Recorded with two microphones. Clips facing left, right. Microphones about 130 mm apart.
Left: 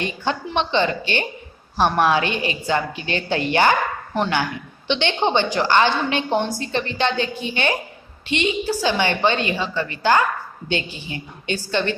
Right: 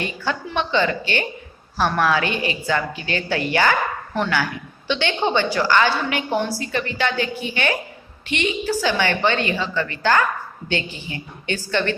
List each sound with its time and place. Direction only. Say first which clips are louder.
0.0 s a woman's voice: left 1 dB; 20° left (ahead or behind)